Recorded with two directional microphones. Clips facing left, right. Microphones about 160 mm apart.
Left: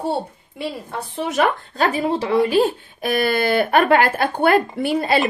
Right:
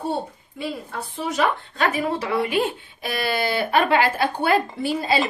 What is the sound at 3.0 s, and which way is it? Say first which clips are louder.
Speech: left 6 dB; 50° left (ahead or behind).